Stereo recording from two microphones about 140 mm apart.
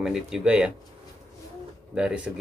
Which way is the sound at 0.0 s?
5° right (ahead or behind).